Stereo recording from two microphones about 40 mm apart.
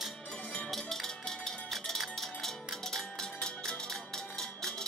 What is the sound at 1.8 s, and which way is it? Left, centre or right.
Music, centre.